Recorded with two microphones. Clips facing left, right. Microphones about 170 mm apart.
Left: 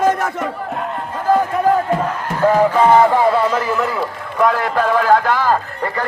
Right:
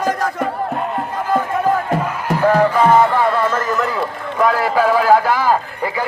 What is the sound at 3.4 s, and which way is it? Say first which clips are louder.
Run: left 1 dB; 10° left (ahead or behind).